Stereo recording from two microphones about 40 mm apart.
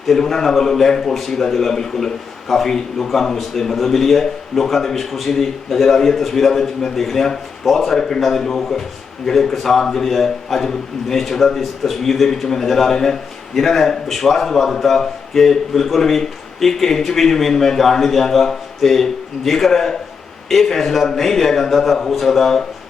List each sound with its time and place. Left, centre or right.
0.1 s a man's voice: centre